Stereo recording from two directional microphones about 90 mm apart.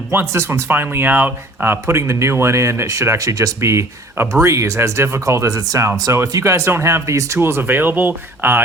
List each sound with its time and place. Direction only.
0.1 s speech: 25° right (ahead or behind)